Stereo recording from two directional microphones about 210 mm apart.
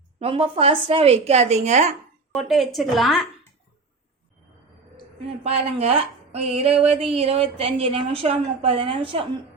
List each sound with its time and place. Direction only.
0.2 s speech: 25° right (ahead or behind)
2.3 s speech: centre (ahead or behind)
5.4 s speech: 30° right (ahead or behind)